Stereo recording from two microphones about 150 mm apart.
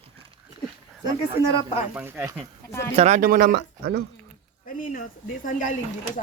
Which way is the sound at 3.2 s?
70° right (ahead or behind).